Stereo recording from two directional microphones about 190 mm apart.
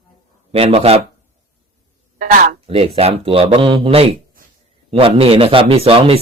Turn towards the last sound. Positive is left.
turn(degrees=-30)  # may be behind; listen again after turning